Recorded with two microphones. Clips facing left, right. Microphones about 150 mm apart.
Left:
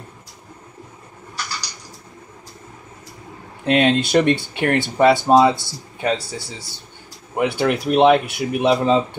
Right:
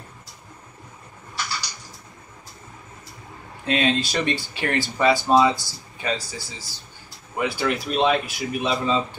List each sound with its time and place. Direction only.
3.6 s speech: 60° left (ahead or behind)